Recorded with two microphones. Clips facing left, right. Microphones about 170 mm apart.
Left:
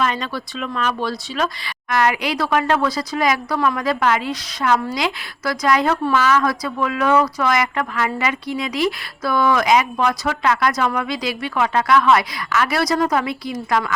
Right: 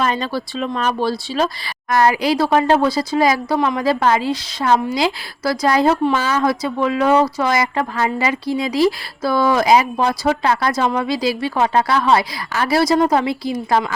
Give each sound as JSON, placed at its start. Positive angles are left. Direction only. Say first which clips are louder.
{"t": 0.0, "sound": "speech", "louder": "right 2 dB", "side_deg": -35}